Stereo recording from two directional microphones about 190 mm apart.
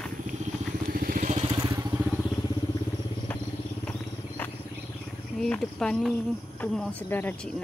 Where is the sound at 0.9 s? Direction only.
45° right (ahead or behind).